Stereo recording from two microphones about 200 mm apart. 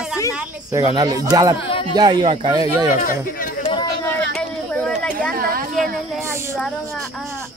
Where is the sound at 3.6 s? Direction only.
25° left (ahead or behind).